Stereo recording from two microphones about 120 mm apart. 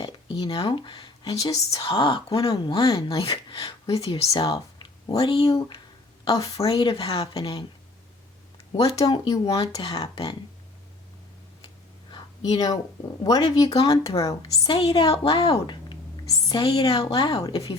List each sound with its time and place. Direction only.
0.0 s speech: 40° left (ahead or behind)
1.8 s speech: 45° left (ahead or behind)
2.3 s speech: 35° left (ahead or behind)
3.6 s speech: 35° left (ahead or behind)
3.9 s speech: 55° left (ahead or behind)
6.3 s a woman's voice: 30° left (ahead or behind)
6.7 s speech: 50° left (ahead or behind)
7.3 s speech: 35° left (ahead or behind)
8.7 s speech: 30° left (ahead or behind)
9.8 s speech: 50° left (ahead or behind)
12.1 s a sound: 35° left (ahead or behind)
13.2 s a woman's voice: 30° left (ahead or behind)
14.7 s speech: 45° left (ahead or behind)
17.4 s speech: 35° left (ahead or behind)